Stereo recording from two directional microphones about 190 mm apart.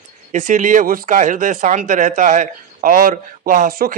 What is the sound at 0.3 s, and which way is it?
Speech, 40° right (ahead or behind).